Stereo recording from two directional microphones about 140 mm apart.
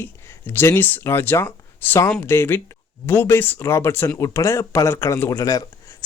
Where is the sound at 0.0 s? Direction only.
15° left (ahead or behind).